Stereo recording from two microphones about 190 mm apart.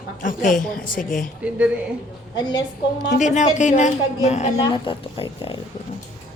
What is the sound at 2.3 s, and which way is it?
Speech, 20° left (ahead or behind).